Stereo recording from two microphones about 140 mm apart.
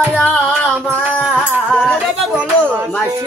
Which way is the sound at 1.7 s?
10° left (ahead or behind).